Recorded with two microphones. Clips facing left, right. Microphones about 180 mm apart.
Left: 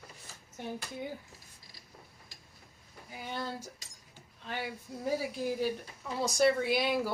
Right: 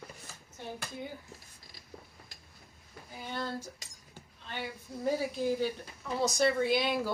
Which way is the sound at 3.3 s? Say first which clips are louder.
Right 1 dB; 10° left (ahead or behind).